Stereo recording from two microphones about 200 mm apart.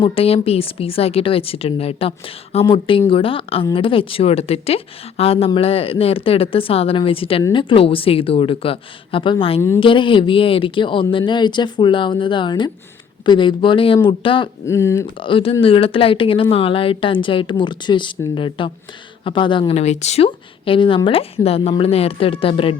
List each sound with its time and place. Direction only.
0.0 s speech: 30° left (ahead or behind)
9.6 s speech: 15° left (ahead or behind)
9.8 s speech: 25° left (ahead or behind)
14.7 s speech: 15° left (ahead or behind)
15.0 s speech: 25° left (ahead or behind)